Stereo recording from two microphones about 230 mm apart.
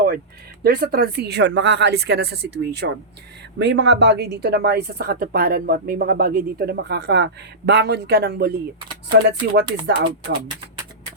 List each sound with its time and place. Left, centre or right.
0.6 s speech: right